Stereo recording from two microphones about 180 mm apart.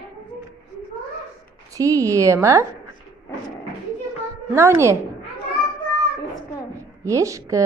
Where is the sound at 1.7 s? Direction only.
20° right (ahead or behind).